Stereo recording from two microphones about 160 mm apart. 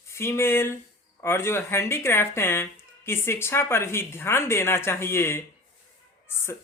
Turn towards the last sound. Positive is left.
turn(degrees=15)  # may be behind; listen again after turning